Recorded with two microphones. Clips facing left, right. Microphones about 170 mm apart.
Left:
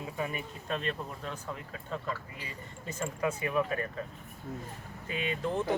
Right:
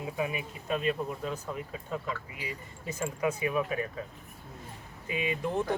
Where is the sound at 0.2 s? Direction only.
5° right (ahead or behind).